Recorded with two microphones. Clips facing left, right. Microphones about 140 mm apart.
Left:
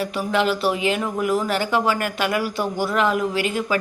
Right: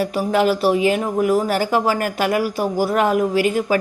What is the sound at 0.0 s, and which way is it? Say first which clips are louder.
Speech: right 4 dB; 40° right (ahead or behind).